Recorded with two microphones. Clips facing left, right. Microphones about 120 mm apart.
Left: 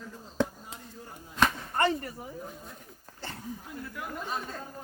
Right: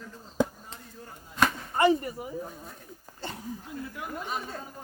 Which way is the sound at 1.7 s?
15° right (ahead or behind).